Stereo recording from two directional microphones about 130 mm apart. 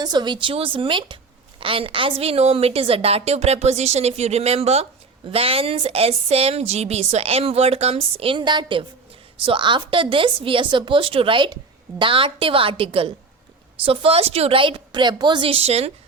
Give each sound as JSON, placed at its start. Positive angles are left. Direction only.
{"t": 0.0, "sound": "a woman's voice", "side_deg": -35}